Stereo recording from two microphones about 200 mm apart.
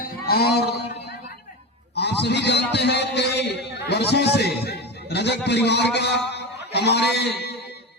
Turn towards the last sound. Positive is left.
turn(degrees=55)  # may be behind; listen again after turning